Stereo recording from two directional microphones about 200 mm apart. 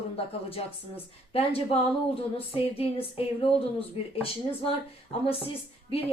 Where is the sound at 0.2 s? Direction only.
30° left (ahead or behind).